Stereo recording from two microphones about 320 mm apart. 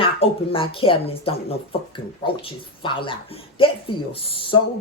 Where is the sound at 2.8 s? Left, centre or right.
Centre.